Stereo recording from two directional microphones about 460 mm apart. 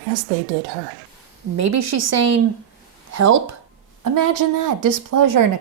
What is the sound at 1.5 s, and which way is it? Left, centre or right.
Speech, right.